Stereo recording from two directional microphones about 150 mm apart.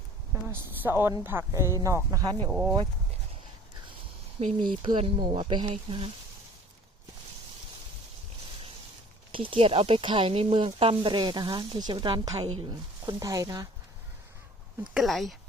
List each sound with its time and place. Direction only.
0.5 s a woman's voice: 15° right (ahead or behind)
2.5 s speech: 5° right (ahead or behind)
4.4 s speech: 35° right (ahead or behind)
9.3 s a woman's voice: 35° right (ahead or behind)
14.9 s speech: centre (ahead or behind)